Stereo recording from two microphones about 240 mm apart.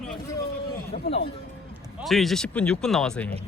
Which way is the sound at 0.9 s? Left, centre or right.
Left.